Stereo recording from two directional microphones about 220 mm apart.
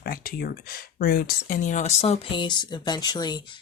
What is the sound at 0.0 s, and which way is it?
A woman's voice, 45° left (ahead or behind).